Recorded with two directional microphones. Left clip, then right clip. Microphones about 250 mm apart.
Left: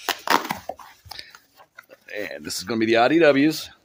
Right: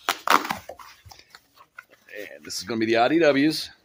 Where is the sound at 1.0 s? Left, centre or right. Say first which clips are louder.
Left 10 dB; left.